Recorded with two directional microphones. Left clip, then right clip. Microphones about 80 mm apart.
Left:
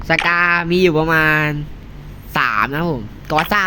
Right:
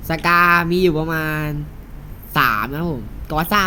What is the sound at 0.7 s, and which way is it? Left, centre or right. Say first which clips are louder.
Speech: left 4 dB; centre.